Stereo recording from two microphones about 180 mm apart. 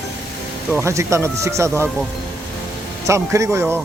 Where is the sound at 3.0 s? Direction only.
15° right (ahead or behind).